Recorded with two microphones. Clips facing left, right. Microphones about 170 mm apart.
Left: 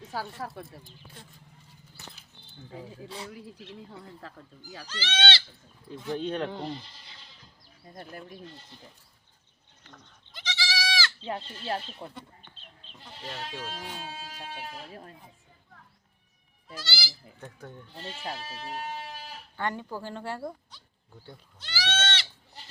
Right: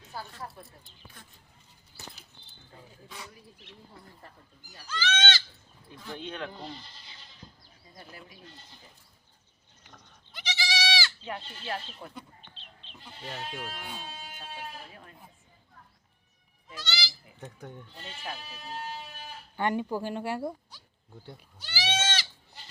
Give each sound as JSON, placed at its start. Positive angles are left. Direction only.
{"t": 0.1, "sound": "speech", "side_deg": 90}
{"t": 2.7, "sound": "speech", "side_deg": 90}
{"t": 4.9, "sound": "speech", "side_deg": 35}
{"t": 7.9, "sound": "speech", "side_deg": 50}
{"t": 10.3, "sound": "goat", "side_deg": -15}
{"t": 11.2, "sound": "speech", "side_deg": 30}
{"t": 12.0, "sound": "speech", "side_deg": 20}
{"t": 12.8, "sound": "goat", "side_deg": 40}
{"t": 16.8, "sound": "speech", "side_deg": 5}
{"t": 17.4, "sound": "speech", "side_deg": -20}
{"t": 18.0, "sound": "speech", "side_deg": 35}
{"t": 18.3, "sound": "speech", "side_deg": 85}
{"t": 19.5, "sound": "speech", "side_deg": -15}
{"t": 21.2, "sound": "goat", "side_deg": -10}